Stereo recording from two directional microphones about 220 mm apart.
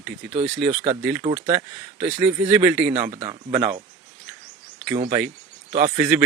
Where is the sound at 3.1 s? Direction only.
25° right (ahead or behind).